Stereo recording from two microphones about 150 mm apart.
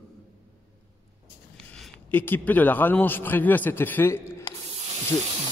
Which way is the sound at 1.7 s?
10° left (ahead or behind).